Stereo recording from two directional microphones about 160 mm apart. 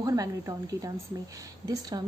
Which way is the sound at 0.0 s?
20° right (ahead or behind).